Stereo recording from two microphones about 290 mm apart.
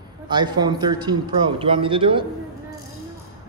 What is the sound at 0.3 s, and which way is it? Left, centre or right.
A man's voice, centre.